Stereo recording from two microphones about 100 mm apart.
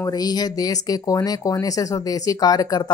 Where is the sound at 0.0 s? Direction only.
40° left (ahead or behind).